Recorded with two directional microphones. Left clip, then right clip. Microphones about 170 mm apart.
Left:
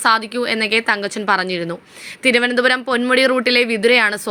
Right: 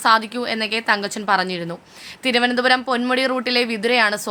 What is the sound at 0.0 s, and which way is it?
A woman's voice, 15° left (ahead or behind).